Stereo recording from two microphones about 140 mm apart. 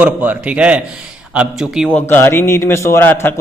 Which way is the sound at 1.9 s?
10° left (ahead or behind).